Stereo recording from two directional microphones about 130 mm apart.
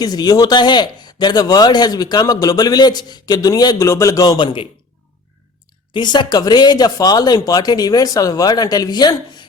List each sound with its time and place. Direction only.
0.0 s a man's voice: 30° left (ahead or behind)
5.9 s a man's voice: 35° left (ahead or behind)